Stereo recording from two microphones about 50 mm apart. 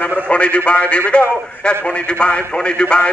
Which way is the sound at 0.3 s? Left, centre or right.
Left.